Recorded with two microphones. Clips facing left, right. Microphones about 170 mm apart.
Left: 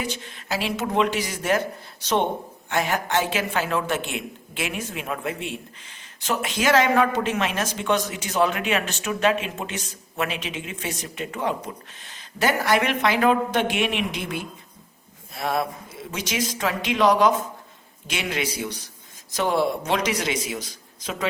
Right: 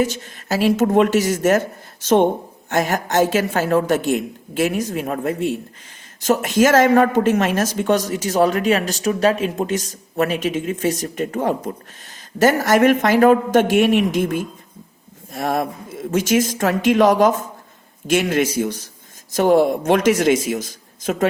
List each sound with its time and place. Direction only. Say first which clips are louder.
0.0 s a woman's voice: right 10 dB; 45° right (ahead or behind)